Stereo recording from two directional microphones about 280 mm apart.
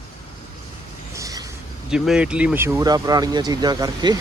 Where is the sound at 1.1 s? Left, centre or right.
Centre.